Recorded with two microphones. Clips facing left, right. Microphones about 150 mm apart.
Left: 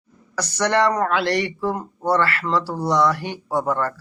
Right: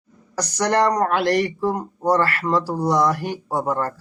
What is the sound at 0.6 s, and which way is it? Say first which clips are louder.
A man's voice: right 1 dB; 40° right (ahead or behind).